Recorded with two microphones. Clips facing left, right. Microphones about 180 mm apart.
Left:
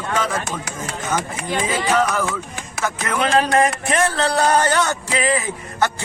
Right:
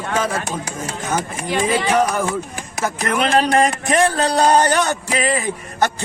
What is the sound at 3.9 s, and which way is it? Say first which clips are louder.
Speech: right 3 dB; 15° right (ahead or behind).